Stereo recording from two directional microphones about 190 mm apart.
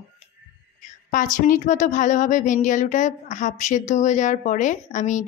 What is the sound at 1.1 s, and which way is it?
Speech, 45° left (ahead or behind).